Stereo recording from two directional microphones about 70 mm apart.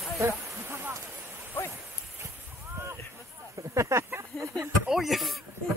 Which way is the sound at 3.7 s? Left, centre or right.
Right.